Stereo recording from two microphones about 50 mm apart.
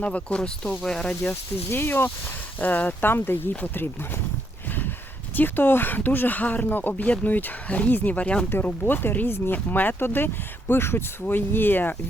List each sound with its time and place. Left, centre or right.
0.0 s speech: left
1.7 s speech: left
2.6 s speech: left
5.4 s speech: left
8.9 s speech: left